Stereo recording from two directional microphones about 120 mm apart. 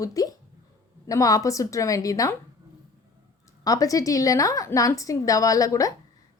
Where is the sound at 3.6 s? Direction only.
30° left (ahead or behind).